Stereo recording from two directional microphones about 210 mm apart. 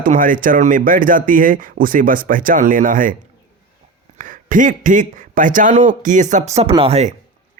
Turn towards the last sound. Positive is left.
turn(degrees=-30)  # may be behind; listen again after turning